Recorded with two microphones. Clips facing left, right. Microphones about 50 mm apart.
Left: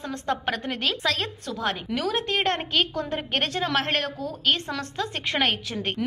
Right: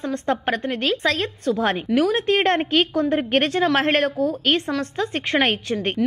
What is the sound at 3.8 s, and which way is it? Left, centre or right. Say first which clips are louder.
Speech: right 5 dB; right.